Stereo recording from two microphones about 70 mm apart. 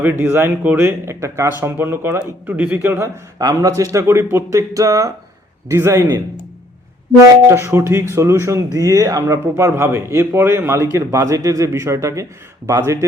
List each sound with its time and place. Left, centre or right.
0.0 s a man's voice: right
3.5 s a man's voice: right
4.0 s speech: right
4.7 s a man's voice: right
5.7 s a man's voice: right
7.4 s a man's voice: right
9.9 s a man's voice: right